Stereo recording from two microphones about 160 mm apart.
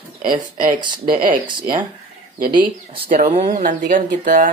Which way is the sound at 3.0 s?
65° right (ahead or behind).